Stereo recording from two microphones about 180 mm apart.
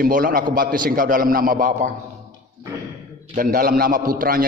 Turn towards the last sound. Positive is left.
turn(degrees=-50)  # may be behind; listen again after turning